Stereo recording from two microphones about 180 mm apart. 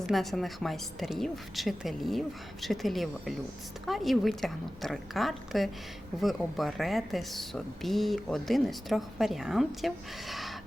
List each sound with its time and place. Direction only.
0.1 s speech: centre (ahead or behind)